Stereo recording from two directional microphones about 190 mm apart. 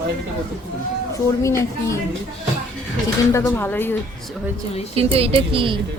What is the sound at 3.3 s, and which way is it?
Speech, 15° left (ahead or behind).